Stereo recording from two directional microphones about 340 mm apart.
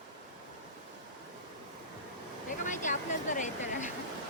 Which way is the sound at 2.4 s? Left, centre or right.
Left.